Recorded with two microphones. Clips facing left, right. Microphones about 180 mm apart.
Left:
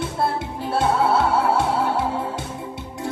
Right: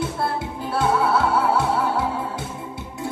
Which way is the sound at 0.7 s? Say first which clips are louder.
Left 1 dB; 25° left (ahead or behind).